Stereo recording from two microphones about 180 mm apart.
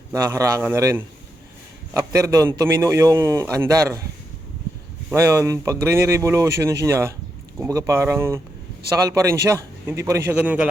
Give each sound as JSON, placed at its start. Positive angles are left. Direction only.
{"t": 0.1, "sound": "a man's voice", "side_deg": -15}
{"t": 5.1, "sound": "a man's voice", "side_deg": -15}